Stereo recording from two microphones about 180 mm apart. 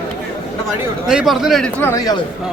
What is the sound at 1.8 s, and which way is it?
Speech, 15° left (ahead or behind).